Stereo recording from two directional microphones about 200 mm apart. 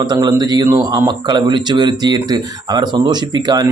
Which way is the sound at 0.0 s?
20° right (ahead or behind).